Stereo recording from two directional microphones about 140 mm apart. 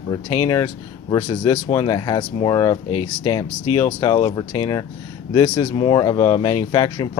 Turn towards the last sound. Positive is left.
turn(degrees=30)  # may be behind; listen again after turning